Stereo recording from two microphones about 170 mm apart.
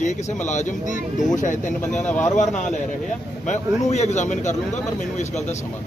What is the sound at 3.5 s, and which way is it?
Speech, 45° left (ahead or behind).